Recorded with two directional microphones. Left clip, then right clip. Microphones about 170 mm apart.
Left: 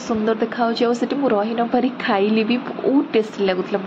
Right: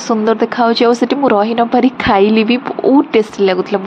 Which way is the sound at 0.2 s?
35° right (ahead or behind).